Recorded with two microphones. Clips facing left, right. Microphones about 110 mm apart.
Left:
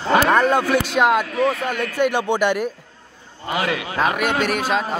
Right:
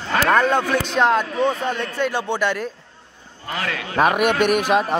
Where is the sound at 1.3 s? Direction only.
30° right (ahead or behind).